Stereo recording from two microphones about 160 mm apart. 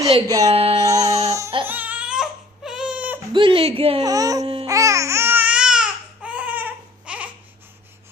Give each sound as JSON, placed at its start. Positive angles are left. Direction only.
{"t": 0.3, "sound": "speech", "side_deg": -25}
{"t": 0.5, "sound": "speech", "side_deg": -40}
{"t": 0.8, "sound": "music", "side_deg": -20}
{"t": 1.6, "sound": "baby cry", "side_deg": -10}
{"t": 3.3, "sound": "speech", "side_deg": -30}
{"t": 4.0, "sound": "speech", "side_deg": -20}
{"t": 4.6, "sound": "music", "side_deg": -20}